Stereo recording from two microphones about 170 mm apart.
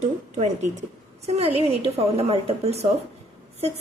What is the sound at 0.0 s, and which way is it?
A woman's voice, 40° right (ahead or behind).